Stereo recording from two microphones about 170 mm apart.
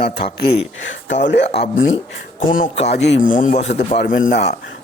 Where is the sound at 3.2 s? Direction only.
50° left (ahead or behind).